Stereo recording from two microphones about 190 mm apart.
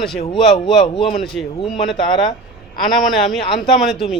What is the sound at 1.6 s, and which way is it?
Speech, centre (ahead or behind).